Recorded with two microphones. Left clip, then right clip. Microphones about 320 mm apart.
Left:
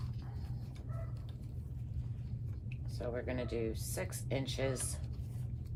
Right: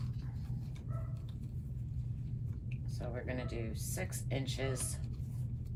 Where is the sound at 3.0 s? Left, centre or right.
Centre.